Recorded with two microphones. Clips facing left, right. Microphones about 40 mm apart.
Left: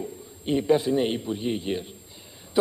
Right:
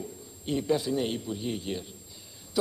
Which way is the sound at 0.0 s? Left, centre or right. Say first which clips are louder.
Left 5 dB; left.